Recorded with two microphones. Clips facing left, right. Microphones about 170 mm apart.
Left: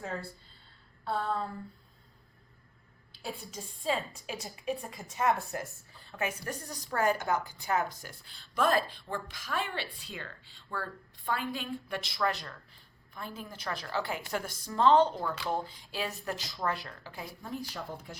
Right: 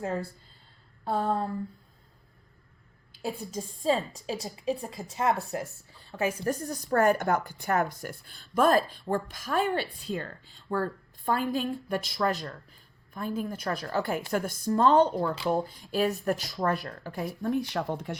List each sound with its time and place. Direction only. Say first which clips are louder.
1.0 s a woman's voice: right 5 dB; 45° right (ahead or behind)
3.2 s a woman's voice: right 7 dB; 40° right (ahead or behind)
17.8 s speech: right 9 dB; 80° right